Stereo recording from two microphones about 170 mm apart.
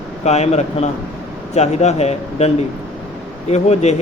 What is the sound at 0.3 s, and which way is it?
Speech, 40° left (ahead or behind).